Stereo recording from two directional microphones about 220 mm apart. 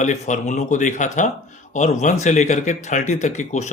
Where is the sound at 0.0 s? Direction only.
35° left (ahead or behind).